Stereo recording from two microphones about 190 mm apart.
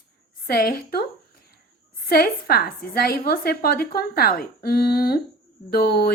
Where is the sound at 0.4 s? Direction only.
50° left (ahead or behind).